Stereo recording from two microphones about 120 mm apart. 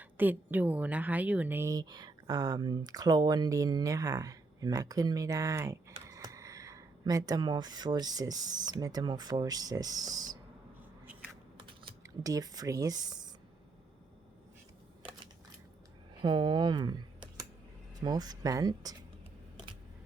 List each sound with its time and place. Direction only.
0.0 s speech: 15° right (ahead or behind)
1.7 s speech: 35° right (ahead or behind)
12.0 s speech: 30° right (ahead or behind)
16.2 s speech: 40° right (ahead or behind)